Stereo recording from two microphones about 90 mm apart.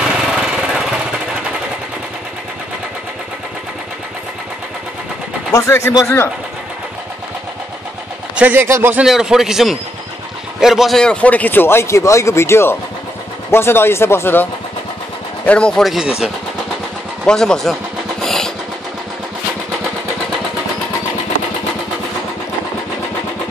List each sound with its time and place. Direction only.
0.0 s a sound: 10° right (ahead or behind)
5.5 s a man's voice: 30° left (ahead or behind)
8.5 s speech: 30° right (ahead or behind)
9.0 s a man's voice: 5° right (ahead or behind); by 14.5 s 25° left (ahead or behind)
15.4 s speech: 10° left (ahead or behind)
15.8 s a man's voice: 5° right (ahead or behind)
17.2 s speech: 5° left (ahead or behind)
18.2 s vehicle: 5° left (ahead or behind)